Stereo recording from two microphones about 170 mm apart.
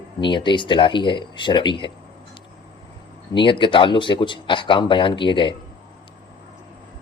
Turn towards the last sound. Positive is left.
turn(degrees=30)  # may be behind; listen again after turning